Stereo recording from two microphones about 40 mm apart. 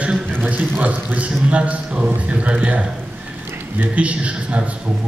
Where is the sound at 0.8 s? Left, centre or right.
Right.